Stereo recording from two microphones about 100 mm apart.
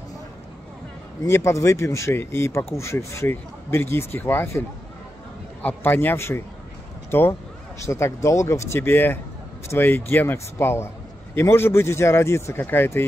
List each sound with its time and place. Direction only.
1.2 s speech: 25° left (ahead or behind)